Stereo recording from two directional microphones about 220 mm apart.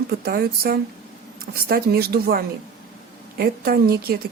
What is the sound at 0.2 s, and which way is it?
A woman's voice, 45° right (ahead or behind).